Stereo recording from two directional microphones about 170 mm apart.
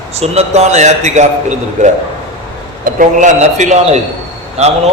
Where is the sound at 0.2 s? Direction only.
40° right (ahead or behind).